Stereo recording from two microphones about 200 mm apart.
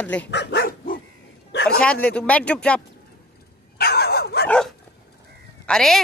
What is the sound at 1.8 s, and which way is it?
Speech, 5° left (ahead or behind).